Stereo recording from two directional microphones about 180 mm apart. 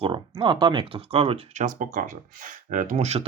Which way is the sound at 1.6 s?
50° right (ahead or behind).